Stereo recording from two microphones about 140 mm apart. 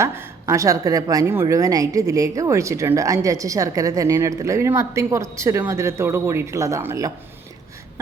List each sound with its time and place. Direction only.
0.0 s a woman's voice: 20° right (ahead or behind)